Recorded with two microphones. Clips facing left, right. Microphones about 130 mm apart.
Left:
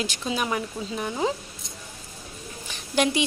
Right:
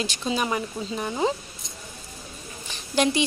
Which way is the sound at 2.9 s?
10° left (ahead or behind).